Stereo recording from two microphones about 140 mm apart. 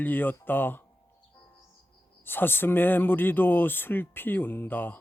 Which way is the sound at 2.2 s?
15° left (ahead or behind).